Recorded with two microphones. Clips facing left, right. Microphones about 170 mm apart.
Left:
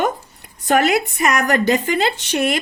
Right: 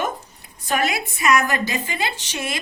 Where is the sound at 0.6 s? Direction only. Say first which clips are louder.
Left 7 dB; 60° left (ahead or behind).